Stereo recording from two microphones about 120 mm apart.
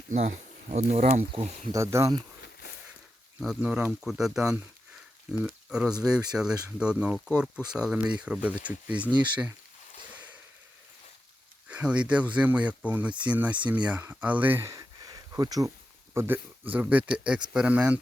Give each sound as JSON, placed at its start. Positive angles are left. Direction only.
{"t": 0.1, "sound": "speech", "side_deg": -90}
{"t": 1.7, "sound": "speech", "side_deg": -25}
{"t": 3.4, "sound": "speech", "side_deg": -5}
{"t": 11.7, "sound": "speech", "side_deg": -10}
{"t": 14.7, "sound": "a sound", "side_deg": -30}
{"t": 16.1, "sound": "speech", "side_deg": -15}